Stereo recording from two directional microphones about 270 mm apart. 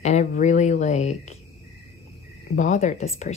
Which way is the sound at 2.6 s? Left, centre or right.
Left.